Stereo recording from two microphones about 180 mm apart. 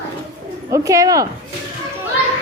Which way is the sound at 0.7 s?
15° right (ahead or behind).